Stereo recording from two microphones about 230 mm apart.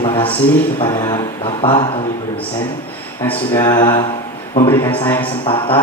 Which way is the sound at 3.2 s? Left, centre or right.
Centre.